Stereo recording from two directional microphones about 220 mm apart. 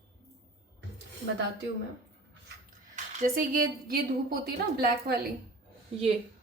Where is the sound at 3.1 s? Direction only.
40° right (ahead or behind).